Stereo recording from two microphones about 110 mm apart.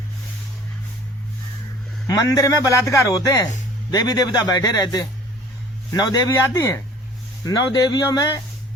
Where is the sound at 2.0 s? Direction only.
35° left (ahead or behind).